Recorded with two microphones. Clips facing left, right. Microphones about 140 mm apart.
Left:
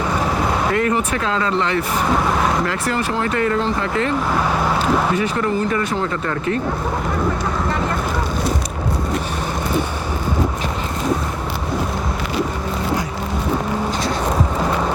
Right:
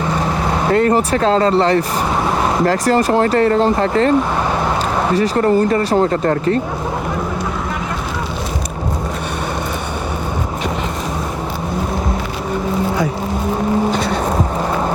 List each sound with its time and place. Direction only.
0.7 s speech: 35° right (ahead or behind)
5.1 s speech: 35° right (ahead or behind)